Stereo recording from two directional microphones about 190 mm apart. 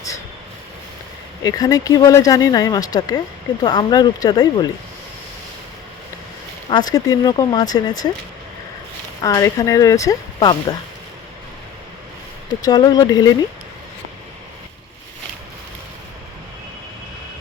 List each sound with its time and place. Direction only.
1.5 s speech: 20° left (ahead or behind)
6.7 s speech: 20° left (ahead or behind)
9.2 s speech: 20° left (ahead or behind)
12.6 s speech: 20° left (ahead or behind)